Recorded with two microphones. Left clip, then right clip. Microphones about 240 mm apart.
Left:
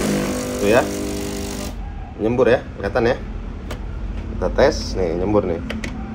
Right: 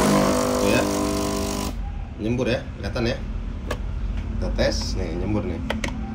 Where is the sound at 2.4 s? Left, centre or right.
Centre.